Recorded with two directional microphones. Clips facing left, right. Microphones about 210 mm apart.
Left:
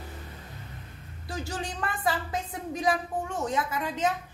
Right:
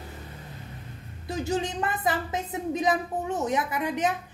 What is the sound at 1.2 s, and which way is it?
A woman's voice, 20° right (ahead or behind).